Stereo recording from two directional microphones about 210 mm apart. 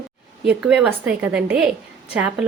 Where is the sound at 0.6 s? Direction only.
5° right (ahead or behind).